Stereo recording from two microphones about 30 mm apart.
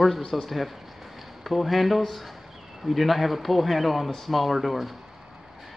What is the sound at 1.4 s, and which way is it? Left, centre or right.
A man's voice, centre.